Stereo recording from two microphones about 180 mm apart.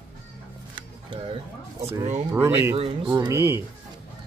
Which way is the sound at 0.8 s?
25° right (ahead or behind).